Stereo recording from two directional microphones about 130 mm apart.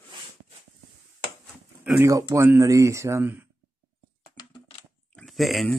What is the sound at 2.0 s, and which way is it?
Speech, 25° right (ahead or behind).